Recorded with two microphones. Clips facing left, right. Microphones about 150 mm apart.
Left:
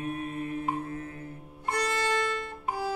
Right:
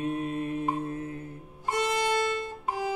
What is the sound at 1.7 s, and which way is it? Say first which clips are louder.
Music: right 2 dB; 15° right (ahead or behind).